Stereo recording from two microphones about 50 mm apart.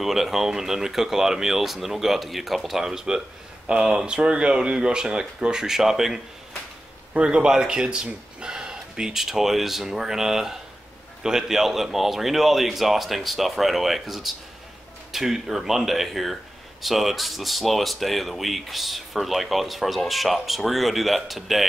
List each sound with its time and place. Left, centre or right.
0.0 s speech: centre
7.2 s speech: centre